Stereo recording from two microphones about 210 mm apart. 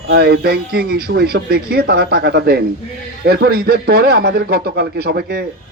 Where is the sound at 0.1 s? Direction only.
50° right (ahead or behind).